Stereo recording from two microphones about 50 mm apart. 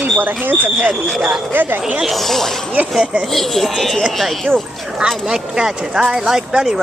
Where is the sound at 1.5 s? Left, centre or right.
Right.